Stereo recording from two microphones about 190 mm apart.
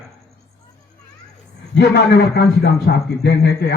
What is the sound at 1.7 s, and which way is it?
A man's voice, 60° left (ahead or behind).